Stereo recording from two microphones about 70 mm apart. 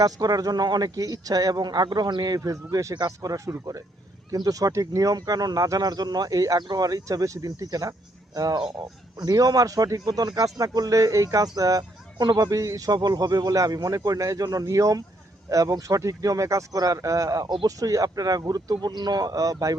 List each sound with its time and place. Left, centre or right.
0.0 s speech: right
2.9 s speech: right
6.6 s speech: right
10.1 s speech: right
12.9 s speech: right
17.5 s speech: right